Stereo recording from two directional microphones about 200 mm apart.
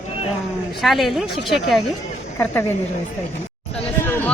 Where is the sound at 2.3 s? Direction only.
10° left (ahead or behind).